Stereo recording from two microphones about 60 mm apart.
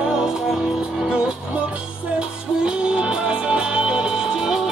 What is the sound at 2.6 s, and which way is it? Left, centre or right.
Music, centre.